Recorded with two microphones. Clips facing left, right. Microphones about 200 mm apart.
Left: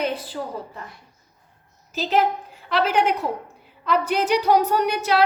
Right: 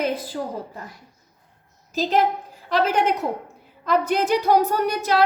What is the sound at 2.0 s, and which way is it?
A woman's voice, 40° right (ahead or behind).